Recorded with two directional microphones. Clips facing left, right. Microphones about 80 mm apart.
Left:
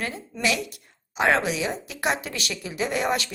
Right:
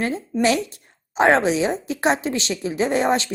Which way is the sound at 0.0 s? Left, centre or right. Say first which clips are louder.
Right 7 dB; right.